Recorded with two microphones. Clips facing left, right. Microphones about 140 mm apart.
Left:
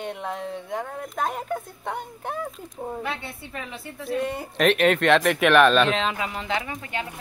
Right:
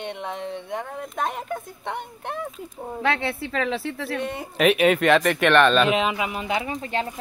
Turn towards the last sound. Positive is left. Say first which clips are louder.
# right 2 dB
turn(degrees=-20)  # may be behind; listen again after turning